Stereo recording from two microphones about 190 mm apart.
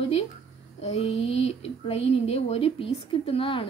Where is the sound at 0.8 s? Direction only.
35° left (ahead or behind).